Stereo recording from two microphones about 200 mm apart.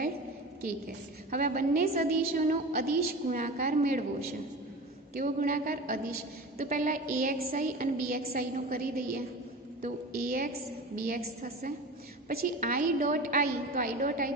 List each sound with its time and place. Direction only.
0.6 s a woman's voice: 45° right (ahead or behind)
5.1 s a woman's voice: 45° right (ahead or behind)